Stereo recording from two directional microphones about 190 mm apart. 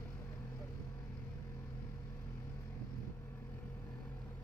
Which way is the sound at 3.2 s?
10° left (ahead or behind).